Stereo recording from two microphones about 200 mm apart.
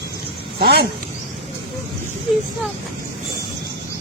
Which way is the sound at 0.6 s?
50° right (ahead or behind).